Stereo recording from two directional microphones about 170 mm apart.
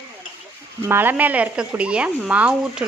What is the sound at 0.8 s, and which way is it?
A woman's voice, 10° right (ahead or behind).